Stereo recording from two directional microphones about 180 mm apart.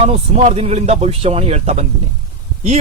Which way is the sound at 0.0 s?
35° right (ahead or behind).